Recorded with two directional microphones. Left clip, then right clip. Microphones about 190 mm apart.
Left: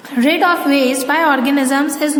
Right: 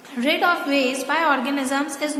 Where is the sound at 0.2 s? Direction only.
25° left (ahead or behind).